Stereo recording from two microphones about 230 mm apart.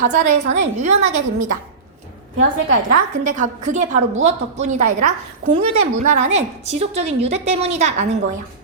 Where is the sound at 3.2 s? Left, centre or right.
Right.